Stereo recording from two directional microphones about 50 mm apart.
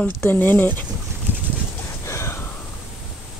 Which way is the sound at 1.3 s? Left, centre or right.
Right.